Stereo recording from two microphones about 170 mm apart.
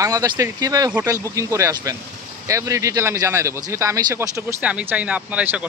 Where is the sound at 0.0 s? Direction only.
20° right (ahead or behind).